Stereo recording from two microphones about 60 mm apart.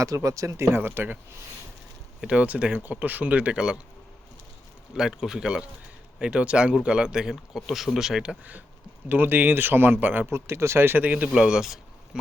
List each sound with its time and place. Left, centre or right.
0.0 s speech: right
0.8 s speech: right
2.2 s speech: centre
4.9 s speech: centre
9.0 s speech: right
10.3 s speech: right; by 12.2 s centre